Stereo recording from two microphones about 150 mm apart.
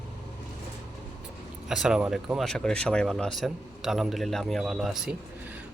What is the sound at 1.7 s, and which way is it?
Speech, 5° right (ahead or behind).